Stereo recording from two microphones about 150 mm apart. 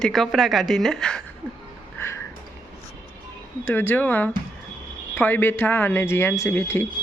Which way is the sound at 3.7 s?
15° left (ahead or behind).